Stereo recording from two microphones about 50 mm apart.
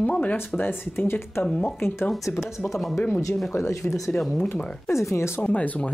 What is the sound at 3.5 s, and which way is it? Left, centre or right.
Speech, left.